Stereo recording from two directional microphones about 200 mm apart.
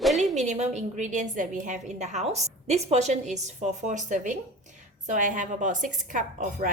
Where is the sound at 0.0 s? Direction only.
Centre (ahead or behind).